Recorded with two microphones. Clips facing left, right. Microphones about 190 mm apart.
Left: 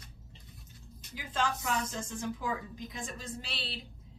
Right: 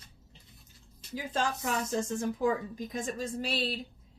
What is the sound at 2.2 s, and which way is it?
Speech, 45° right (ahead or behind).